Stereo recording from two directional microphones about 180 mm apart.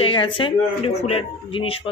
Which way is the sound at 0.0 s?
30° left (ahead or behind).